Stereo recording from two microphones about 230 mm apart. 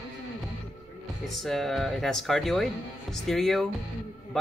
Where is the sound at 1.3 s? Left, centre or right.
Centre.